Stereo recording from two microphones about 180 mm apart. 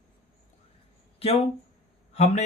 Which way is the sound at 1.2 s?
30° left (ahead or behind).